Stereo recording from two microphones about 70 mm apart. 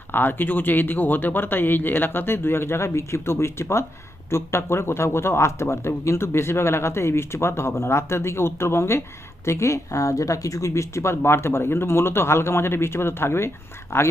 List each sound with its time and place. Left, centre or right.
0.1 s speech: left